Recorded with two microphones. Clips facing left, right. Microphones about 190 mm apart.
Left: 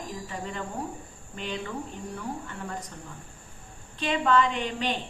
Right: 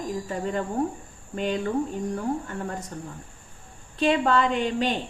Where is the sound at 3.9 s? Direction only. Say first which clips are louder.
Right 3 dB; 45° right (ahead or behind).